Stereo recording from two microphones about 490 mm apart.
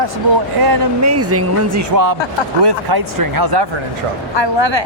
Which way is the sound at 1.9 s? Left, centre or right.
Right.